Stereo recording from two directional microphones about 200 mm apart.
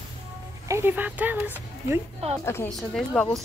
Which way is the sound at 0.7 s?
10° right (ahead or behind).